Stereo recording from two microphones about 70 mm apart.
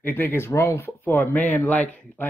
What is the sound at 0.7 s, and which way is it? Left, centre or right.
Speech, left.